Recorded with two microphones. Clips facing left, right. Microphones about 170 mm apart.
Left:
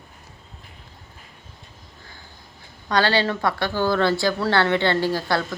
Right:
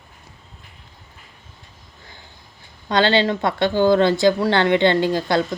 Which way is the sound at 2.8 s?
20° right (ahead or behind).